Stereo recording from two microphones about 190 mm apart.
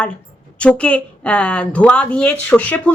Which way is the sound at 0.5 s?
5° left (ahead or behind).